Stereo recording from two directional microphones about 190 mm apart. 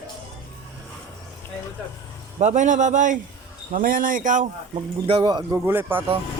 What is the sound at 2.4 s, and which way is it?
A man's voice, 40° right (ahead or behind).